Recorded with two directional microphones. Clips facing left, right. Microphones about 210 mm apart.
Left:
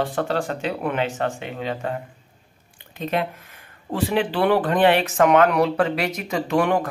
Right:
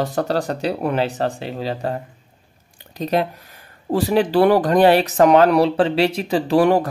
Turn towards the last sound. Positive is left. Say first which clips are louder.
# right 5 dB
turn(degrees=-35)  # may be behind; listen again after turning